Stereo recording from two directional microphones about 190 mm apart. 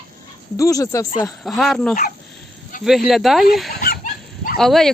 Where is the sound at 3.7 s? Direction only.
55° left (ahead or behind).